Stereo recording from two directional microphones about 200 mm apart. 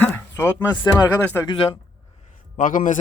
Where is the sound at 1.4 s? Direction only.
25° left (ahead or behind).